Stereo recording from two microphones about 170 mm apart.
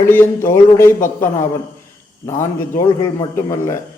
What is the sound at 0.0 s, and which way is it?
A man's voice, 10° left (ahead or behind).